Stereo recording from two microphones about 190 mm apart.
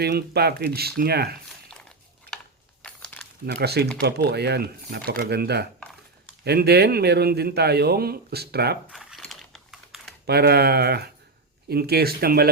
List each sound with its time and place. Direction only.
0.0 s speech: 55° right (ahead or behind)
2.8 s crumpling: 5° left (ahead or behind)
3.4 s speech: 60° right (ahead or behind)
8.9 s a sound: centre (ahead or behind)
10.2 s speech: 55° right (ahead or behind)